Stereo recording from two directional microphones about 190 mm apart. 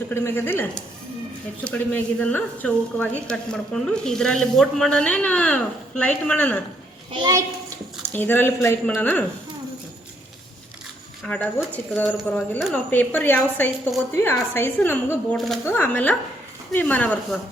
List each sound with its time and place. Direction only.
0.1 s speech: 10° left (ahead or behind)
7.1 s a child's voice: 20° right (ahead or behind)
8.1 s speech: 10° left (ahead or behind)
11.2 s speech: 5° left (ahead or behind)
12.7 s speech: 10° left (ahead or behind)